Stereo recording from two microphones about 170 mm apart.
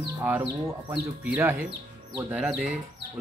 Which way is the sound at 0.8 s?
10° right (ahead or behind).